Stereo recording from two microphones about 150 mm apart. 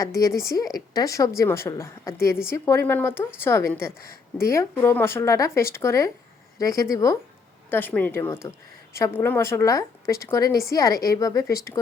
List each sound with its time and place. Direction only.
0.0 s a woman's voice: 20° left (ahead or behind)
7.7 s a woman's voice: 10° left (ahead or behind)